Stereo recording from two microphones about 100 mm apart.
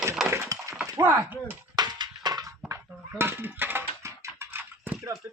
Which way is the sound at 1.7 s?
45° right (ahead or behind).